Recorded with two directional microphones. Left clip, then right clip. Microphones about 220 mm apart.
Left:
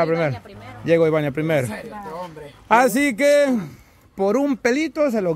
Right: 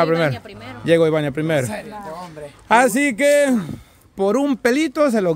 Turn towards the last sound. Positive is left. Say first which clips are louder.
# right 3 dB
turn(degrees=-20)  # may be behind; listen again after turning